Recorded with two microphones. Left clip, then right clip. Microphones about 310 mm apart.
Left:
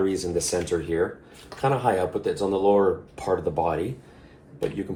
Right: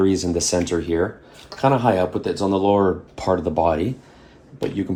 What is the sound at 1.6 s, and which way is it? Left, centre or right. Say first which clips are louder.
Speech: right 5 dB; right.